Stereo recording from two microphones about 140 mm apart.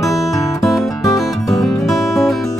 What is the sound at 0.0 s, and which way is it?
Music, centre (ahead or behind).